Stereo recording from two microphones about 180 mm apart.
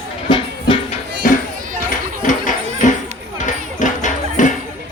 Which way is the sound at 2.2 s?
45° left (ahead or behind).